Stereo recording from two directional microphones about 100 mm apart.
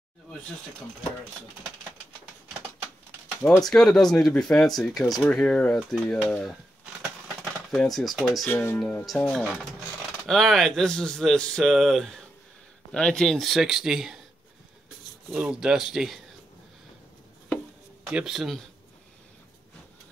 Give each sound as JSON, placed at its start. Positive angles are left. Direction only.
{"t": 3.4, "sound": "speech", "side_deg": 5}
{"t": 7.7, "sound": "speech", "side_deg": 0}
{"t": 8.5, "sound": "speech", "side_deg": 15}
{"t": 9.0, "sound": "speech", "side_deg": 0}
{"t": 13.2, "sound": "speech", "side_deg": 0}
{"t": 15.4, "sound": "speech", "side_deg": -10}
{"t": 18.1, "sound": "speech", "side_deg": -5}